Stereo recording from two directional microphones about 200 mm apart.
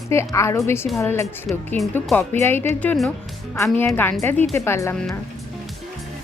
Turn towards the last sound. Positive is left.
turn(degrees=15)  # may be behind; listen again after turning